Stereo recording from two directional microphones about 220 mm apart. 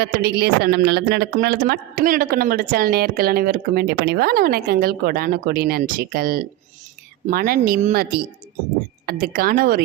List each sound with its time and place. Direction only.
0.0 s speech: 45° right (ahead or behind)
9.0 s speech: 40° right (ahead or behind)